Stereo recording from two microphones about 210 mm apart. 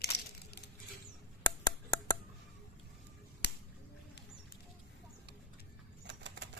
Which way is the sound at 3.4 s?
55° left (ahead or behind).